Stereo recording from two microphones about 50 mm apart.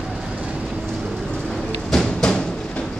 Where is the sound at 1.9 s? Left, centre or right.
Centre.